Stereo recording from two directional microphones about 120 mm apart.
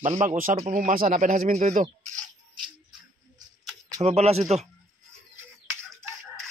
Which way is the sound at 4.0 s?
65° right (ahead or behind).